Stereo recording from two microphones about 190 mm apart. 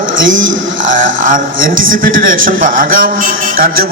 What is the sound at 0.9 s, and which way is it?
A man's voice, 45° right (ahead or behind).